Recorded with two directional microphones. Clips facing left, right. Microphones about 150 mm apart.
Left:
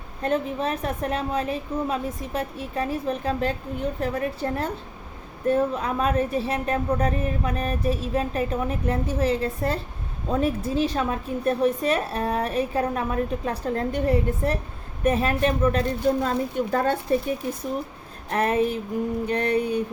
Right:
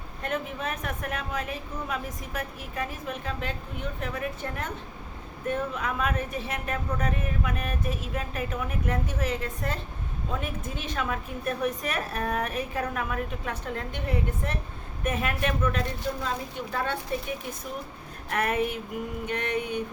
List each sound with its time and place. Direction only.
0.2 s a woman's voice: 30° left (ahead or behind)
16.2 s a woman's voice: 45° left (ahead or behind)
18.3 s a woman's voice: 30° left (ahead or behind)